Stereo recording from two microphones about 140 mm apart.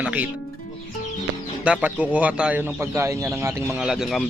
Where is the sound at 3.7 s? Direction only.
5° right (ahead or behind).